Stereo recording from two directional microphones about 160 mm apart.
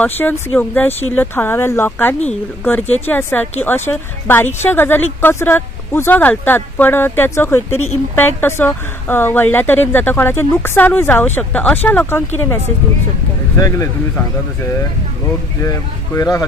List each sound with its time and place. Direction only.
0.2 s speech: 10° left (ahead or behind)
13.6 s speech: 20° left (ahead or behind)
15.6 s speech: 20° left (ahead or behind)